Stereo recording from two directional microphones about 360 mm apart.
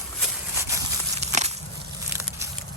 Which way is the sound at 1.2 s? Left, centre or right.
Centre.